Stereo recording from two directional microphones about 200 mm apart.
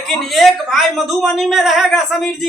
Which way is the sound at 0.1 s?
Centre (ahead or behind).